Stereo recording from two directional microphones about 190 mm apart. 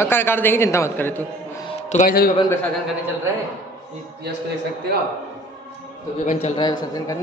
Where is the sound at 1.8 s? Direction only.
40° left (ahead or behind).